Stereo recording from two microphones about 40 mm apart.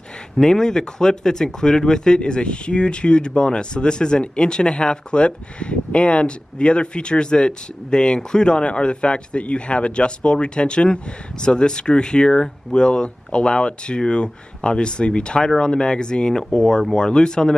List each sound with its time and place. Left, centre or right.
0.4 s speech: centre